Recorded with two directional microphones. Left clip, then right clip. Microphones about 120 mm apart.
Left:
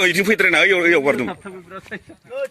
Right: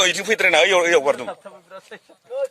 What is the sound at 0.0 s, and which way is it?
A man's voice, 15° right (ahead or behind).